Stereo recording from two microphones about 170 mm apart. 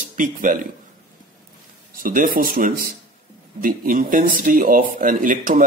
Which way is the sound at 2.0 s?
55° right (ahead or behind).